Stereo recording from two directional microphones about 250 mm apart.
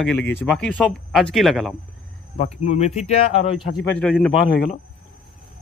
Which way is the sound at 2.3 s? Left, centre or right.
Left.